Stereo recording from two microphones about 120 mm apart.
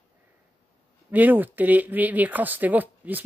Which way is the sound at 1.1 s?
15° right (ahead or behind).